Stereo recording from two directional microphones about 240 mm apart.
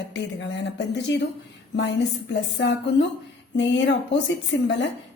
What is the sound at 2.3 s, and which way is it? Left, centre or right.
A woman's voice, left.